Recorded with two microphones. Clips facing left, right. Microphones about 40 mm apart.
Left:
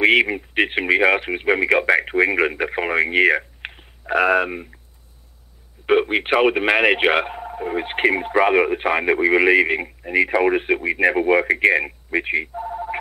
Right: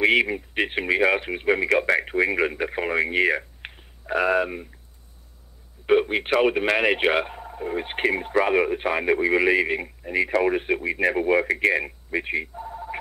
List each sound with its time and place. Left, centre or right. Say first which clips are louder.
0.0 s speech: left 4 dB; left
5.9 s speech: left 3 dB; left